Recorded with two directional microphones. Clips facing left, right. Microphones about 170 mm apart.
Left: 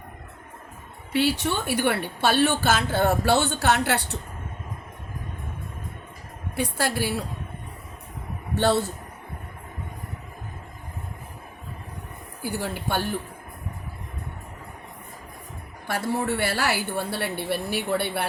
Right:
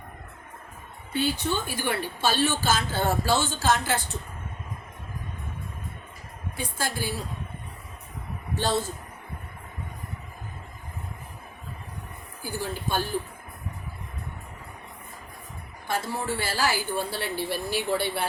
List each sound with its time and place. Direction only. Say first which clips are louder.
1.1 s a woman's voice: left 3 dB; 80° left
6.6 s a woman's voice: left 6 dB; 65° left (ahead or behind)
8.5 s a woman's voice: left 5 dB; 65° left (ahead or behind)
12.4 s a woman's voice: left 3 dB; 65° left (ahead or behind)
15.9 s a woman's voice: left 3 dB; 65° left (ahead or behind)